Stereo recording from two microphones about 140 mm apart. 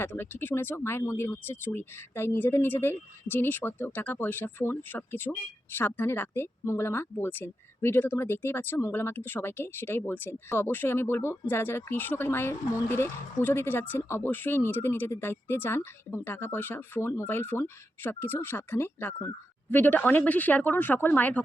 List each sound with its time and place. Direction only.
0.0 s speech: 15° left (ahead or behind)